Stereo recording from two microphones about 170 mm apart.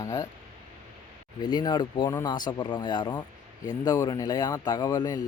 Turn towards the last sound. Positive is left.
turn(degrees=25)  # may be behind; listen again after turning